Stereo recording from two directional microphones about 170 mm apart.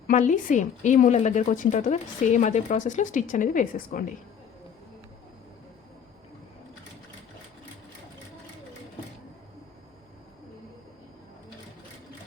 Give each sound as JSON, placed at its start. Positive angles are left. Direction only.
{"t": 0.1, "sound": "a woman's voice", "side_deg": 50}